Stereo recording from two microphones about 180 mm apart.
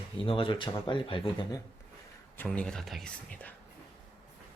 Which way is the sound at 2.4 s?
5° left (ahead or behind).